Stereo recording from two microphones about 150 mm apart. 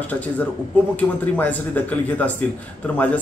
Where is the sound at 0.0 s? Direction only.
10° left (ahead or behind).